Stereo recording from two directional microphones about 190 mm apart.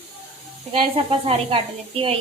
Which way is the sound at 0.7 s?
30° right (ahead or behind).